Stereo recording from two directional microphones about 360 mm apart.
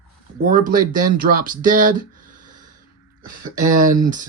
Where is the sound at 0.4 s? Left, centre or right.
Right.